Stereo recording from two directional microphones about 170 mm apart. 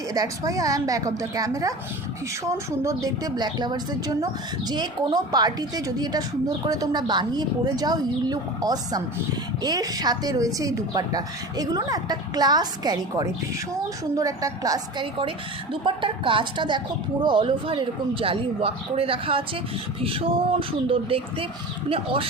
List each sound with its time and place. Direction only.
0.1 s a woman's voice: 20° right (ahead or behind)